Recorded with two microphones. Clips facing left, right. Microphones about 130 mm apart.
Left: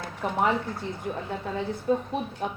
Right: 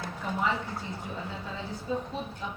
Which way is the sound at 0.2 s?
65° left (ahead or behind).